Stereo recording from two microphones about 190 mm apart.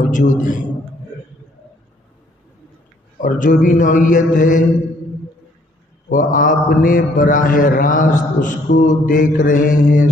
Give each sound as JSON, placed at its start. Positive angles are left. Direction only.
{"t": 0.1, "sound": "a man's voice", "side_deg": 40}
{"t": 3.2, "sound": "a man's voice", "side_deg": 45}
{"t": 6.0, "sound": "a man's voice", "side_deg": 45}